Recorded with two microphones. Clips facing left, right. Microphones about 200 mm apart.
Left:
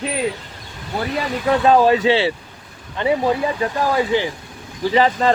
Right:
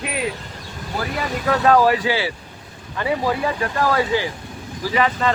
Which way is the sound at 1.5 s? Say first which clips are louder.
Left 2 dB; 25° left (ahead or behind).